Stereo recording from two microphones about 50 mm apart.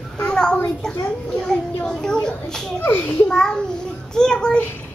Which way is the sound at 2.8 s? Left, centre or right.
Left.